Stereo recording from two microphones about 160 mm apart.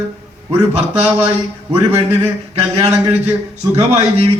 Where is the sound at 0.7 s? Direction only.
40° right (ahead or behind).